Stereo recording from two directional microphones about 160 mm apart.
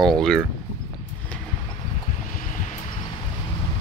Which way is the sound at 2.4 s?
55° left (ahead or behind).